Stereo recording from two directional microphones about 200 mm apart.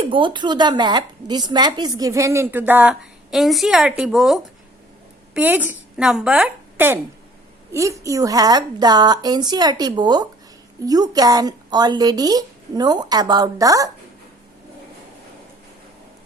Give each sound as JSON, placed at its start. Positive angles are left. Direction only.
{"t": 0.0, "sound": "a woman's voice", "side_deg": -25}